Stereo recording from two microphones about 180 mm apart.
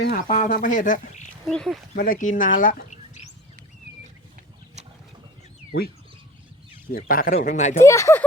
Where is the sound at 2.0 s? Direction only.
50° left (ahead or behind).